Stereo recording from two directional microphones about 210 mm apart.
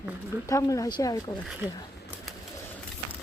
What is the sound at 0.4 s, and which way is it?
Speech, 15° left (ahead or behind).